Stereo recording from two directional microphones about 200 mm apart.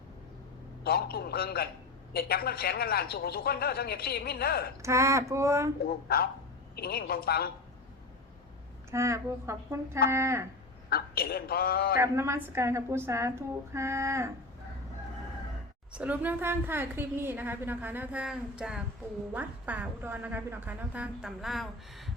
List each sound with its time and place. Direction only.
0.9 s speech: 50° left (ahead or behind)
4.8 s a woman's voice: 15° right (ahead or behind)
5.8 s speech: 50° left (ahead or behind)
8.9 s a woman's voice: 15° right (ahead or behind)
10.8 s speech: 50° left (ahead or behind)
11.9 s a woman's voice: 15° right (ahead or behind)
15.9 s a woman's voice: 5° right (ahead or behind)